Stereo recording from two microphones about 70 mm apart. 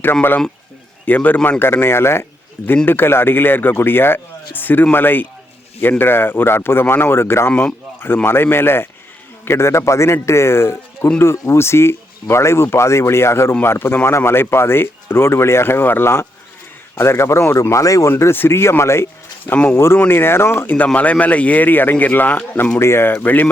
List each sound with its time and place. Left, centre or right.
0.0 s a man's voice: left
18.2 s speech: left
20.7 s a man's voice: left
22.8 s speech: left